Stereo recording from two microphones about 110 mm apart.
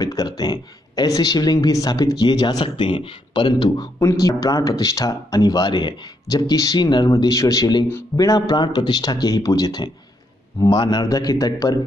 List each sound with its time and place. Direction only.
0.0 s speech: 35° left (ahead or behind)
2.6 s speech: 50° left (ahead or behind); by 11.8 s 35° left (ahead or behind)